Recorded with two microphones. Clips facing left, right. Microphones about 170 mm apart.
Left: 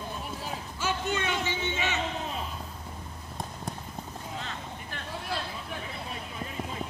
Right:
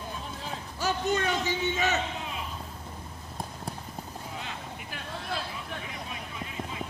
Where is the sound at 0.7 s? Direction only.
40° right (ahead or behind).